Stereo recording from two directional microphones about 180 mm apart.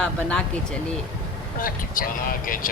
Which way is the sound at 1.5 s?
50° left (ahead or behind).